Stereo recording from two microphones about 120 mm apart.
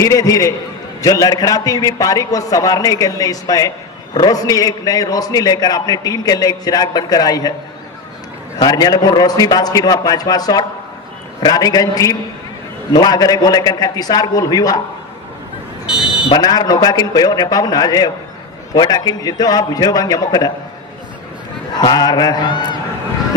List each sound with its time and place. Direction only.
0.0 s a man's voice: 30° left (ahead or behind)
8.5 s a man's voice: 35° left (ahead or behind)
15.9 s fire alarm: 5° right (ahead or behind)
16.3 s a man's voice: 35° left (ahead or behind)
21.7 s a man's voice: 35° left (ahead or behind)